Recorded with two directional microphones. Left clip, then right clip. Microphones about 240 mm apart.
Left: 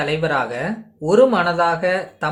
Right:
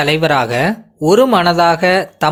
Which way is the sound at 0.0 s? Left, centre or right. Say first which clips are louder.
Right 7 dB; right.